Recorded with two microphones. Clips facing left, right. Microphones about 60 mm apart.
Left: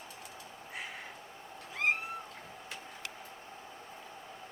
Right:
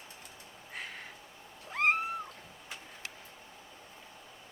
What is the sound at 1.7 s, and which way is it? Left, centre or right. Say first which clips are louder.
Cat: right 3 dB; right.